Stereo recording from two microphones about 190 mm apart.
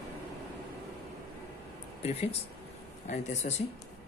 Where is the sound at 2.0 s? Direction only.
35° left (ahead or behind).